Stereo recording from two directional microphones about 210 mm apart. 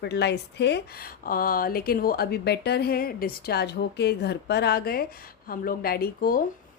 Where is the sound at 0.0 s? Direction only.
50° left (ahead or behind).